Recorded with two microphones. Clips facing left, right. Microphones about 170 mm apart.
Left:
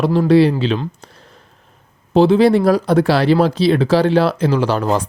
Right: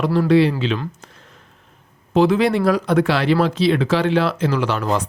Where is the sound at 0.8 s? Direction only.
35° left (ahead or behind).